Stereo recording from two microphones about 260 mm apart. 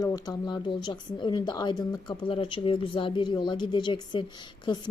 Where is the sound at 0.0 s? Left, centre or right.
Centre.